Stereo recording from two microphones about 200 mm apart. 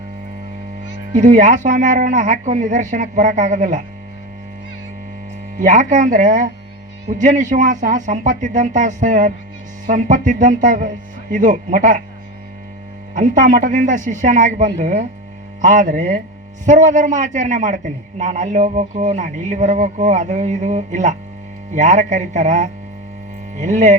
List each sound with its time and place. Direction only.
1.1 s a man's voice: 40° right (ahead or behind)
5.5 s a man's voice: 40° right (ahead or behind)
13.1 s a man's voice: 40° right (ahead or behind)